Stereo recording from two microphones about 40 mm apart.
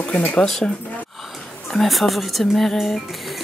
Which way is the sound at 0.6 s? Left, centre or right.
Left.